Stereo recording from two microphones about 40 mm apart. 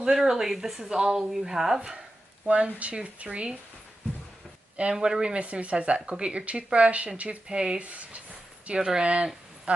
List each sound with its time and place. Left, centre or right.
0.0 s speech: centre
2.4 s speech: right
4.9 s speech: centre
7.4 s speech: right
7.8 s speech: right
8.7 s speech: centre
9.0 s speech: right